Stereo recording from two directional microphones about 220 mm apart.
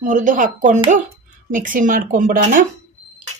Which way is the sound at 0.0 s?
35° right (ahead or behind).